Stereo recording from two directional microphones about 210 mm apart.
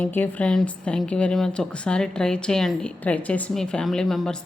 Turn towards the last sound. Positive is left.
turn(degrees=0)  # may be behind; listen again after turning